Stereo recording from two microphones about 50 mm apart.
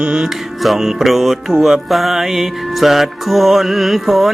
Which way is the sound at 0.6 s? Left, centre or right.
Centre.